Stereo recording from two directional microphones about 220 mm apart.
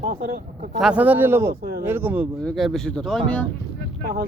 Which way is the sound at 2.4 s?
Centre (ahead or behind).